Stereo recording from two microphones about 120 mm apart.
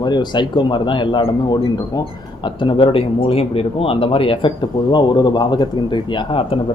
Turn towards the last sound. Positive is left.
turn(degrees=45)  # may be behind; listen again after turning